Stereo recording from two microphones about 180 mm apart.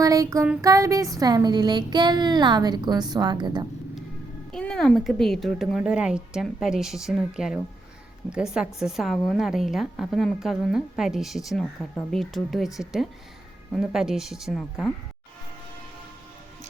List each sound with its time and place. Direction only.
0.0 s music: 20° right (ahead or behind)
0.6 s speech: 15° right (ahead or behind)
4.5 s a woman's voice: 5° left (ahead or behind)